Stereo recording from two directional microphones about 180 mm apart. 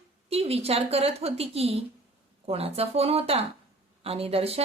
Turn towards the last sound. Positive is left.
turn(degrees=-35)  # may be behind; listen again after turning